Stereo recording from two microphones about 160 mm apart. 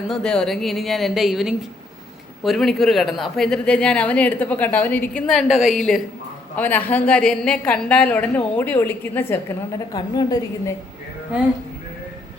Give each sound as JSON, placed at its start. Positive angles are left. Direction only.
{"t": 0.1, "sound": "a woman's voice", "side_deg": 5}
{"t": 9.9, "sound": "a woman's voice", "side_deg": 25}